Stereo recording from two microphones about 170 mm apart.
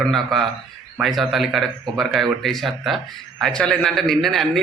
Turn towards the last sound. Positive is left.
turn(degrees=0)  # may be behind; listen again after turning